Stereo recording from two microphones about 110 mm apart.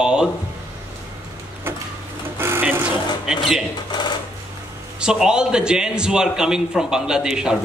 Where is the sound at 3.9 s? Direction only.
40° left (ahead or behind).